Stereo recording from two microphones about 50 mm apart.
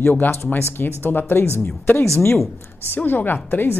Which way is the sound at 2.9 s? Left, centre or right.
Left.